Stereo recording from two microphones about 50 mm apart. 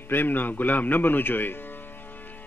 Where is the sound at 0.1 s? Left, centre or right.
Left.